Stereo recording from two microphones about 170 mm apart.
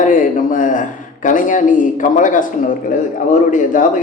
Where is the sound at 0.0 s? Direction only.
50° left (ahead or behind).